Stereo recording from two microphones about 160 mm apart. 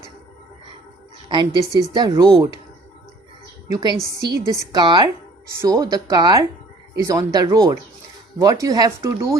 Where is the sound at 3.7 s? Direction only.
25° right (ahead or behind).